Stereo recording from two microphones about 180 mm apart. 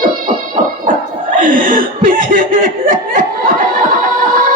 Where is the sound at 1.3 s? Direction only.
50° right (ahead or behind).